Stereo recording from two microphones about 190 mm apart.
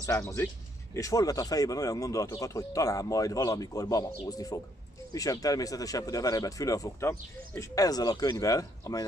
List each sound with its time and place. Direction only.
0.0 s speech: 15° left (ahead or behind)